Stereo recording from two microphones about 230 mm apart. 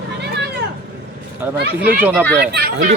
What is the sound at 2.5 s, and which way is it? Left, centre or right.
Speech, right.